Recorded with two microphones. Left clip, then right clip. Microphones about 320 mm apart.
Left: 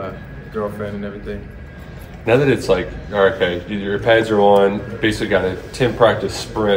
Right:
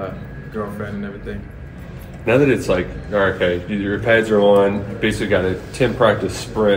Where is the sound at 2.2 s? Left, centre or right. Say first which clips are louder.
Left 1 dB; left.